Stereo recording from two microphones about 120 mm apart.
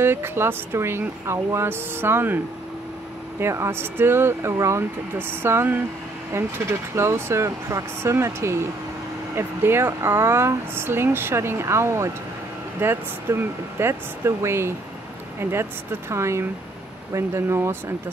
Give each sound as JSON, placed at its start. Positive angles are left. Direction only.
{"t": 0.0, "sound": "speech", "side_deg": -20}